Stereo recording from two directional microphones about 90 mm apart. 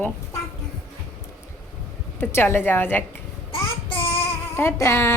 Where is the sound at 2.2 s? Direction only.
25° left (ahead or behind).